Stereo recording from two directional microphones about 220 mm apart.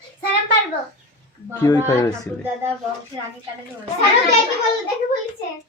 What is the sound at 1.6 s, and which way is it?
Speech, 15° left (ahead or behind).